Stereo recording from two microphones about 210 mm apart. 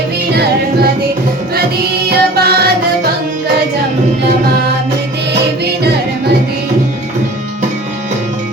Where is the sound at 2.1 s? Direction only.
50° right (ahead or behind).